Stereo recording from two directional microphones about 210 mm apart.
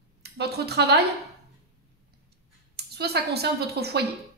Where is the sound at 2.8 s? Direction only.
50° right (ahead or behind).